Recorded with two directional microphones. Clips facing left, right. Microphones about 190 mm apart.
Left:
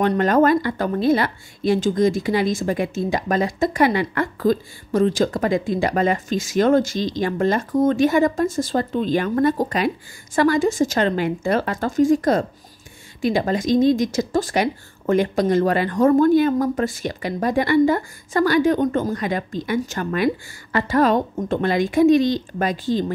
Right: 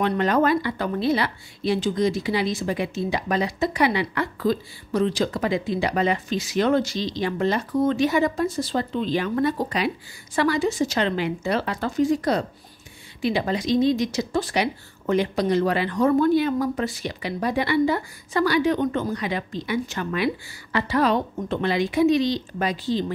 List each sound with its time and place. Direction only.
0.0 s a woman's voice: 45° left (ahead or behind)